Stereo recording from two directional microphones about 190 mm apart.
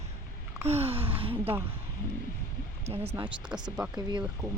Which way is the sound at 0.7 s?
30° right (ahead or behind).